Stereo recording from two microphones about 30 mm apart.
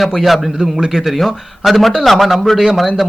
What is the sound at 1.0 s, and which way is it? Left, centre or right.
A man's voice, centre.